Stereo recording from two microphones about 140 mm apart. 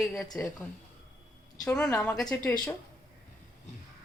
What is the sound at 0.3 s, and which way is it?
Speech, 15° left (ahead or behind).